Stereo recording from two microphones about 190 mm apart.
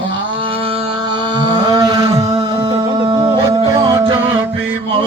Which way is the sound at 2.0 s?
30° right (ahead or behind).